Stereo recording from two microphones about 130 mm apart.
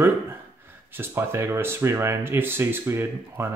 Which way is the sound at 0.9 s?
20° right (ahead or behind).